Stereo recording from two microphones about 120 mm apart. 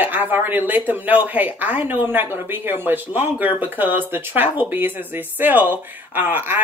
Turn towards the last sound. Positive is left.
turn(degrees=-15)  # may be behind; listen again after turning